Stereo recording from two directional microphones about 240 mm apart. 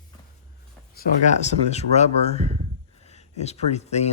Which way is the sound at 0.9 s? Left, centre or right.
Left.